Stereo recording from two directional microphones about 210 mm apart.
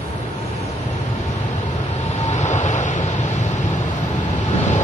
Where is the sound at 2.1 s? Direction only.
35° left (ahead or behind).